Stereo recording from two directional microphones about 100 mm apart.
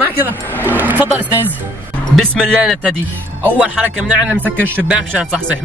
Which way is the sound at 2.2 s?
10° left (ahead or behind).